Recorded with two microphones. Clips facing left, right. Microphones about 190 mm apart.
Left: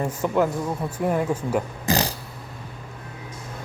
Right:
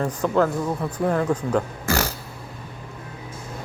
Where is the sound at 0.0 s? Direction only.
15° left (ahead or behind).